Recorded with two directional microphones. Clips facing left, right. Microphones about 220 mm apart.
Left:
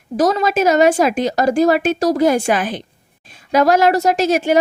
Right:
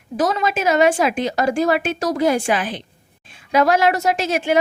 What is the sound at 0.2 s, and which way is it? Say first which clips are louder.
Speech: left 5 dB; 40° left (ahead or behind).